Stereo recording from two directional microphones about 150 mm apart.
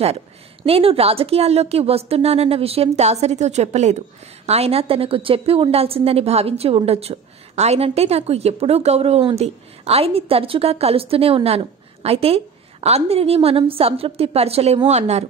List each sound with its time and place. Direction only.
0.7 s a woman's voice: 40° right (ahead or behind)